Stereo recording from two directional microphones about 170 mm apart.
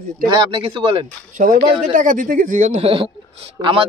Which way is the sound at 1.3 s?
55° right (ahead or behind).